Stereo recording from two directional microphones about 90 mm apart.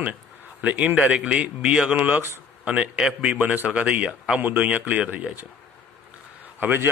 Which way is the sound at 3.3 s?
20° right (ahead or behind).